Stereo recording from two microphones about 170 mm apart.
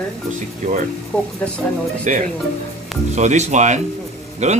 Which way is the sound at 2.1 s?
45° right (ahead or behind).